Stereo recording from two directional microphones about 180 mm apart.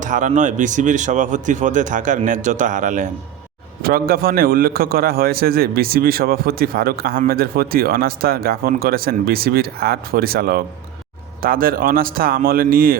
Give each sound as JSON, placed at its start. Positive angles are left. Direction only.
{"t": 0.0, "sound": "speech", "side_deg": -45}
{"t": 3.8, "sound": "a man's voice", "side_deg": -55}